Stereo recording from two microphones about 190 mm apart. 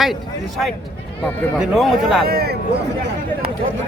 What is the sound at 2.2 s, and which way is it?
Speech, 55° right (ahead or behind).